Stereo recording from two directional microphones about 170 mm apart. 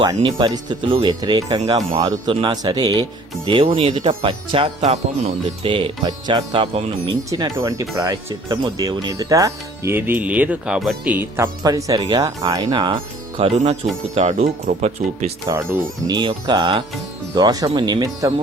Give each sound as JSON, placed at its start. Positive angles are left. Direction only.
{"t": 0.0, "sound": "speech", "side_deg": -30}
{"t": 7.3, "sound": "speech", "side_deg": -20}
{"t": 15.4, "sound": "speech", "side_deg": -20}